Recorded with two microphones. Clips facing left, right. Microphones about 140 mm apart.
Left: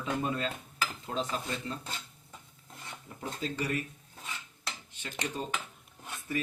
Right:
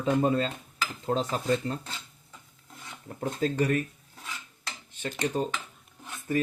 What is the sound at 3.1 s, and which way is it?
Speech, 50° right (ahead or behind).